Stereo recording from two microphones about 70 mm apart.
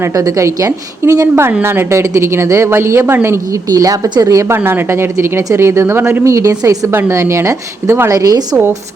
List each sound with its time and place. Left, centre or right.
0.2 s a woman's voice: right
1.6 s speech: right
3.7 s a woman's voice: right
4.5 s speech: right
8.1 s a woman's voice: right